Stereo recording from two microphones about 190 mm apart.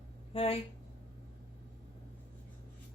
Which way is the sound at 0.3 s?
30° left (ahead or behind).